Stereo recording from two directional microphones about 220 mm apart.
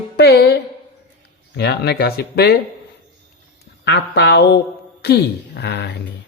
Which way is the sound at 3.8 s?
50° left (ahead or behind).